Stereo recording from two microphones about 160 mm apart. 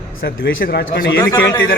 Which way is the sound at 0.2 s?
70° left (ahead or behind).